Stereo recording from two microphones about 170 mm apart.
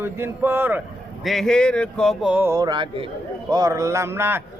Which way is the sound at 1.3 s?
Centre (ahead or behind).